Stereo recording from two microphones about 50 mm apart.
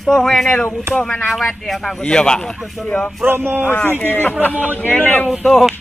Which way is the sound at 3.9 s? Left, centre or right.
Left.